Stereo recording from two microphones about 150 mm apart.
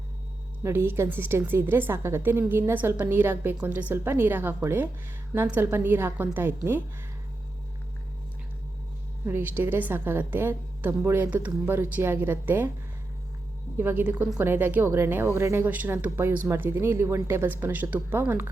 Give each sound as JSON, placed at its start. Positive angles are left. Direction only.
{"t": 0.6, "sound": "a woman's voice", "side_deg": -15}
{"t": 9.2, "sound": "a woman's voice", "side_deg": -15}
{"t": 13.7, "sound": "a woman's voice", "side_deg": -15}